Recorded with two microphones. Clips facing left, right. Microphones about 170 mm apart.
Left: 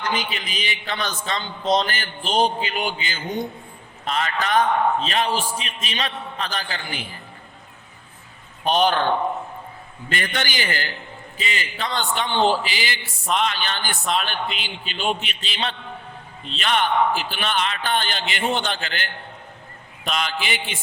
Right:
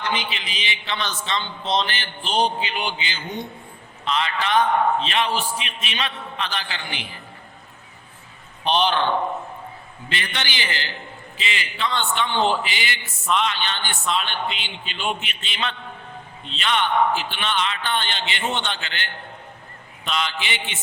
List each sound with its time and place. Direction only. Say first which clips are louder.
0.0 s a man's voice: left 1 dB; 45° left (ahead or behind)
8.6 s a man's voice: left 1 dB; 45° left (ahead or behind)
10.1 s a man's voice: left 3 dB; 45° left (ahead or behind)
20.1 s a man's voice: left 1 dB; 45° left (ahead or behind)